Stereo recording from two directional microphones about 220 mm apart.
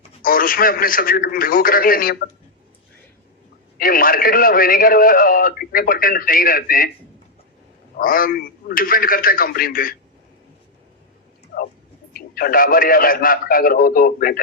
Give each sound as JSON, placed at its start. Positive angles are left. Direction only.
{"t": 0.2, "sound": "a man's voice", "side_deg": 40}
{"t": 3.8, "sound": "a man's voice", "side_deg": 40}
{"t": 7.9, "sound": "a man's voice", "side_deg": 40}
{"t": 12.1, "sound": "a man's voice", "side_deg": 40}